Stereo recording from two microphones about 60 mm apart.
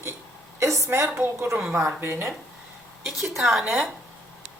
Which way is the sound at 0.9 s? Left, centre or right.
Right.